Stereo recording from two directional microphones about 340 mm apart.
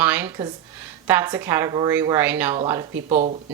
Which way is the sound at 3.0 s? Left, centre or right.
Right.